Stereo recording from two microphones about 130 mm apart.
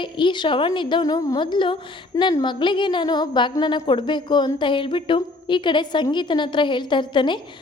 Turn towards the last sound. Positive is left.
turn(degrees=35)  # may be behind; listen again after turning